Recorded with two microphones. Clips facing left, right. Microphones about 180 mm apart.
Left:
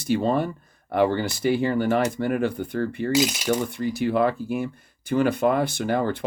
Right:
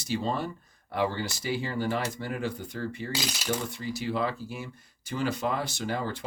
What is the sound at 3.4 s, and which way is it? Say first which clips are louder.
Speech: left 8 dB; 55° left (ahead or behind).